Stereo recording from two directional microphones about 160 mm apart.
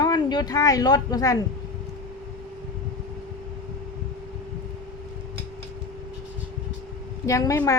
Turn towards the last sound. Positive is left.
turn(degrees=20)  # may be behind; listen again after turning